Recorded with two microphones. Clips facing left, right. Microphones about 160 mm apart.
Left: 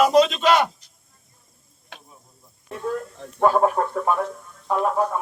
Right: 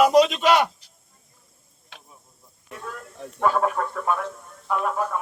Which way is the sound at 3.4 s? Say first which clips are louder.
Left 4 dB; 35° left (ahead or behind).